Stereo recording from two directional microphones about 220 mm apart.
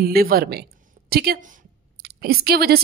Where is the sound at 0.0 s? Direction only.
45° right (ahead or behind).